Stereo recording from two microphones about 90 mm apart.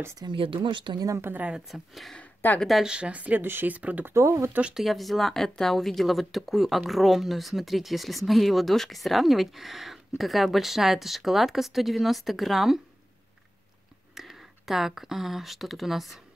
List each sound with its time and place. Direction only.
0.2 s speech: 70° right (ahead or behind)
1.0 s speech: 35° right (ahead or behind)
1.3 s speech: 15° right (ahead or behind)
1.7 s speech: centre (ahead or behind); by 4.1 s 15° right (ahead or behind)
4.1 s speech: 30° right (ahead or behind)
4.6 s speech: 10° right (ahead or behind)
4.8 s speech: centre (ahead or behind)
14.1 s speech: centre (ahead or behind)